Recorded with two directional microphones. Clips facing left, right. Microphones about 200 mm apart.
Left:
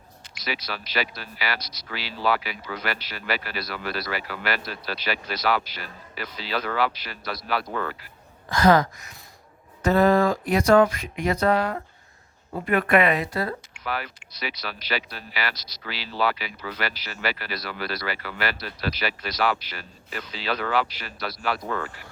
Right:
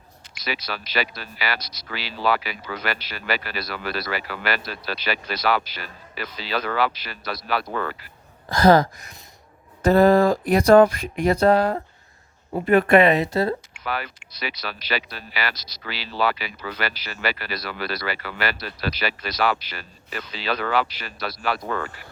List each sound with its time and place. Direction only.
0.5 s speech: 75° right (ahead or behind)
1.9 s speech: 85° right; by 7.9 s 65° right (ahead or behind)
8.4 s speech: 35° right (ahead or behind)
13.8 s speech: 75° right (ahead or behind)
15.5 s speech: 25° right (ahead or behind)
15.9 s speech: 80° right
20.3 s speech: 70° right (ahead or behind)